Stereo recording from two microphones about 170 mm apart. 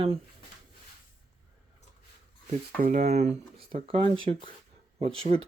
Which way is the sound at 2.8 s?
50° right (ahead or behind).